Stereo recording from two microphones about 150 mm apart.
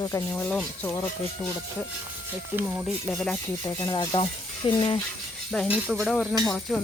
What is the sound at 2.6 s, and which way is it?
Speech, 10° right (ahead or behind).